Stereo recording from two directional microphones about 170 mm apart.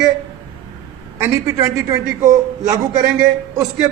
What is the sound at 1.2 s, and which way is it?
A man's voice, 15° right (ahead or behind).